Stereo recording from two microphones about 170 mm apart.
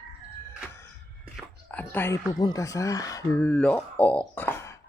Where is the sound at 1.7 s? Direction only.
10° left (ahead or behind).